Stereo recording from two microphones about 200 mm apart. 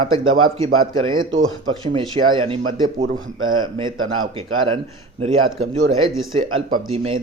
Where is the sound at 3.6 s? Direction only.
25° right (ahead or behind).